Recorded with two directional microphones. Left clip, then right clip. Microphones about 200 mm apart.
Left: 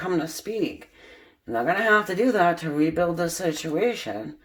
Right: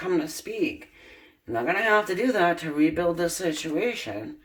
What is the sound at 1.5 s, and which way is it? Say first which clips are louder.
Speech: left 2 dB; 35° left (ahead or behind).